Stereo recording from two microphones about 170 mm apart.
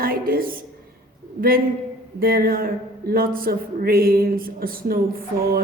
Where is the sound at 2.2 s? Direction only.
60° right (ahead or behind).